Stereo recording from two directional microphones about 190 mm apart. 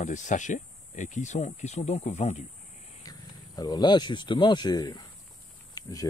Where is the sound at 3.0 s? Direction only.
20° left (ahead or behind).